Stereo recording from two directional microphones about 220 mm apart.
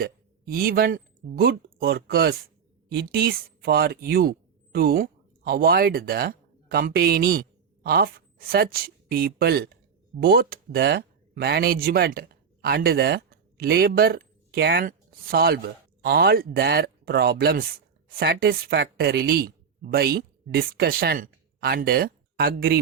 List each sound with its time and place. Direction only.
0.0 s a woman's voice: 40° right (ahead or behind)